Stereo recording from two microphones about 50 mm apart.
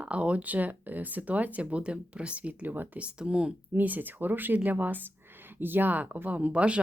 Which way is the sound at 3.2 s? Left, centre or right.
Centre.